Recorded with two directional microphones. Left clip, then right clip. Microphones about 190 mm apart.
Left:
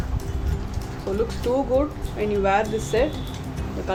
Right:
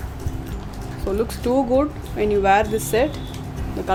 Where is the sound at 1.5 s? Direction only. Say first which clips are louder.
Right 3 dB; 60° right (ahead or behind).